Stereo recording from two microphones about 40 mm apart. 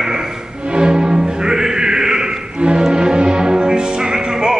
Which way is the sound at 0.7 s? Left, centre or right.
Right.